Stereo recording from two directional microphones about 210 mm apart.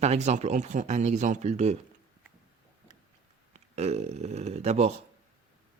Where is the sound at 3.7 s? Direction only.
30° right (ahead or behind).